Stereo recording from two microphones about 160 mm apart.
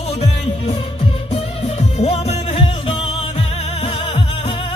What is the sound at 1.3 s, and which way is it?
Music, 40° left (ahead or behind).